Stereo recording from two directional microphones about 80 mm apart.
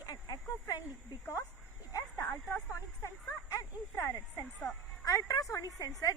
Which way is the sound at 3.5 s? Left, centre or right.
Left.